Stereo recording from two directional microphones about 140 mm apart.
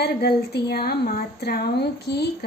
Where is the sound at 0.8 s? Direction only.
90° left.